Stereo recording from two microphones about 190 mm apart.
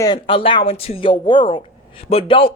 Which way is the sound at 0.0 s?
25° left (ahead or behind).